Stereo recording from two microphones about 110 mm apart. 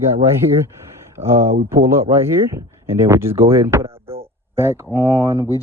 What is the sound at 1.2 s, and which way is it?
Speech, 25° right (ahead or behind).